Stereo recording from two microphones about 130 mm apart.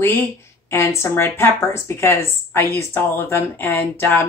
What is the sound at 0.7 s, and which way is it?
A woman's voice, 20° left (ahead or behind).